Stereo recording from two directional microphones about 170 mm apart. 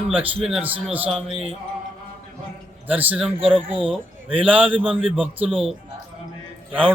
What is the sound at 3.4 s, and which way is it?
Speech, 30° right (ahead or behind).